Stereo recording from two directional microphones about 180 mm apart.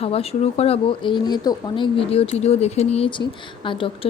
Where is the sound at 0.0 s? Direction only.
35° left (ahead or behind).